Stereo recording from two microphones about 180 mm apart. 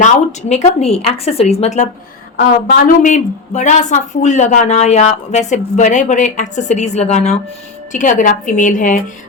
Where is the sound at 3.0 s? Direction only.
45° left (ahead or behind).